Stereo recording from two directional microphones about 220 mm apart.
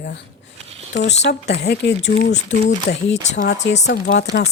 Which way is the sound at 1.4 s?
50° left (ahead or behind).